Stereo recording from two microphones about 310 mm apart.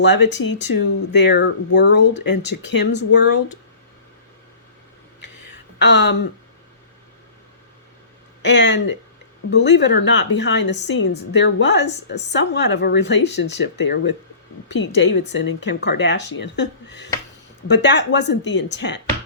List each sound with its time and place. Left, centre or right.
0.0 s speech: left
5.2 s a sound: left
5.8 s speech: left
8.4 s speech: left